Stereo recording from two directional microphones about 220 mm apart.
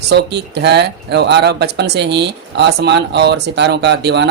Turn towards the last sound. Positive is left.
turn(degrees=-50)  # may be behind; listen again after turning